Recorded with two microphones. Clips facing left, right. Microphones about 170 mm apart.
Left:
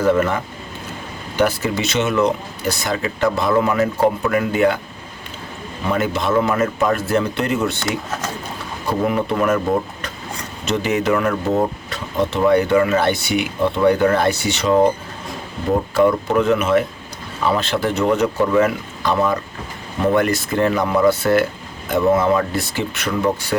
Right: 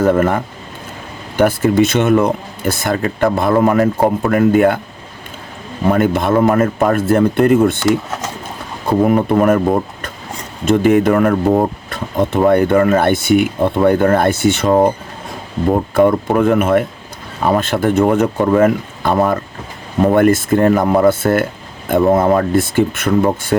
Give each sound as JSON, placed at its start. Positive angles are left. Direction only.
{"t": 0.0, "sound": "speech", "side_deg": -50}
{"t": 5.8, "sound": "speech", "side_deg": -50}
{"t": 8.9, "sound": "speech", "side_deg": -45}
{"t": 10.7, "sound": "speech", "side_deg": -50}
{"t": 16.0, "sound": "speech", "side_deg": -50}